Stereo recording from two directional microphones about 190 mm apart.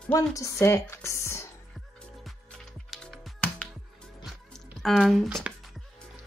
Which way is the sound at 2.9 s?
Centre (ahead or behind).